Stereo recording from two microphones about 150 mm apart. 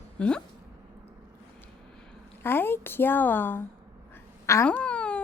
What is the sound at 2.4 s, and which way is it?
A woman's voice, 15° left (ahead or behind).